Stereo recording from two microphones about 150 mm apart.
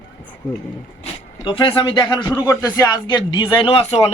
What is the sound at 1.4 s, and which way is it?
A man's voice, 35° left (ahead or behind).